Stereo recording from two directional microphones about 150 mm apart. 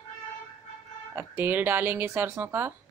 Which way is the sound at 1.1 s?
15° right (ahead or behind).